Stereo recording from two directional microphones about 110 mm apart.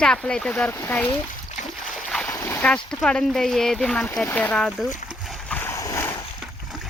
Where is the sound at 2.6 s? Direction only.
10° left (ahead or behind).